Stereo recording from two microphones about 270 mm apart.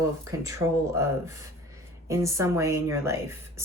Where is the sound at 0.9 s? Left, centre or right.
Centre.